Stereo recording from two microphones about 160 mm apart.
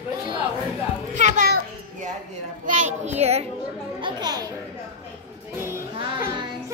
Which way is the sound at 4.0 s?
30° right (ahead or behind).